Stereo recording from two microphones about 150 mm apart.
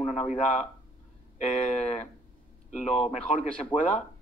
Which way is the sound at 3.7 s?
25° left (ahead or behind).